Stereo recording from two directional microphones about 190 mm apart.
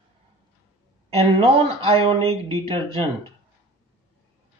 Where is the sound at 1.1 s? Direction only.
30° right (ahead or behind).